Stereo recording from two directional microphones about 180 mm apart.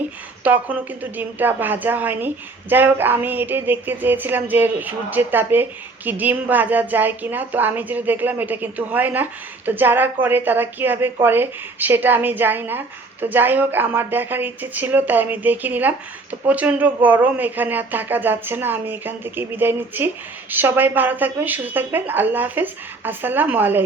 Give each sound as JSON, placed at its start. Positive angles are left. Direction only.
{"t": 0.4, "sound": "speech", "side_deg": -10}